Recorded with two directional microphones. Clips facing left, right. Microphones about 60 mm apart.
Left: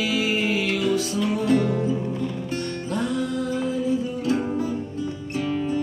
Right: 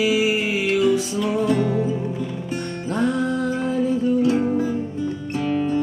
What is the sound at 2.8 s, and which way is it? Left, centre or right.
Music, right.